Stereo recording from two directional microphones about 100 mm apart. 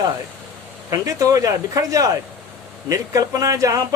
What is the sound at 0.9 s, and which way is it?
Speech, 35° right (ahead or behind).